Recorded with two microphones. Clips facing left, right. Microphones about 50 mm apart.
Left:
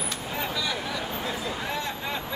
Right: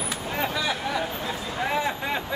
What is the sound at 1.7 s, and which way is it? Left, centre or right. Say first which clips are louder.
Vehicle: right 5 dB; centre.